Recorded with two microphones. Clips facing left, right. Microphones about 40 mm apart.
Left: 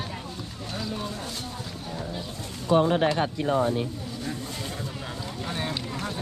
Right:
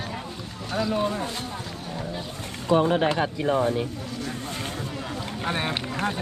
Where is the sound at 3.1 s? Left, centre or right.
Right.